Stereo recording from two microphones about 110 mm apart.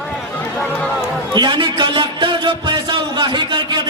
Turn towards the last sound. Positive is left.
turn(degrees=-45)  # may be behind; listen again after turning